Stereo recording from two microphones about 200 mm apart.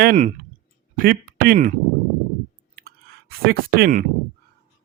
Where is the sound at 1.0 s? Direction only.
45° right (ahead or behind).